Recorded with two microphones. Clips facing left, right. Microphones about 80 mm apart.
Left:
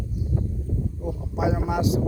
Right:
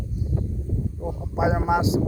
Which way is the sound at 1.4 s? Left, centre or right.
Right.